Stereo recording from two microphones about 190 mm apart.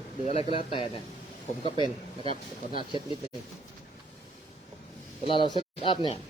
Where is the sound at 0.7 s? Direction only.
25° left (ahead or behind).